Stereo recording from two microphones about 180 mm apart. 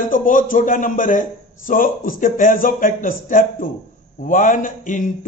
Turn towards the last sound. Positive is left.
turn(degrees=45)  # may be behind; listen again after turning